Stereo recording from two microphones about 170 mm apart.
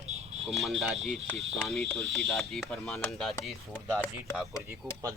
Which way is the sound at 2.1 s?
Centre (ahead or behind).